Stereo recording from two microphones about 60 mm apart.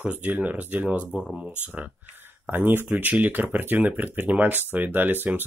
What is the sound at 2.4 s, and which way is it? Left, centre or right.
Speech, right.